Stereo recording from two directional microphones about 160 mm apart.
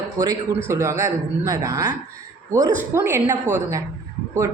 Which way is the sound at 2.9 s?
15° right (ahead or behind).